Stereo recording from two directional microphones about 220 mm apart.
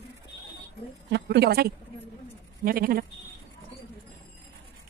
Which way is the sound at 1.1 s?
50° right (ahead or behind).